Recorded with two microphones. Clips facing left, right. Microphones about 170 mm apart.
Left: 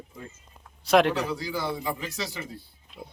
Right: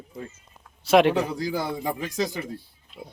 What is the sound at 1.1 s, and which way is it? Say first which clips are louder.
A man's voice: right 4 dB; 45° right (ahead or behind).